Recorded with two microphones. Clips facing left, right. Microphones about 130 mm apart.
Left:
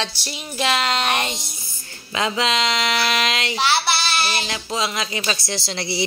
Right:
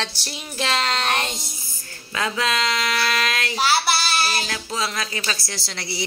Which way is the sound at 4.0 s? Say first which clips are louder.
Even; 40° right (ahead or behind).